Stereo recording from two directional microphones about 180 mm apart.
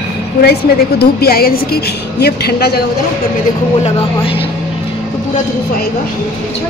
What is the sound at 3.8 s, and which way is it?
Speech, 30° left (ahead or behind).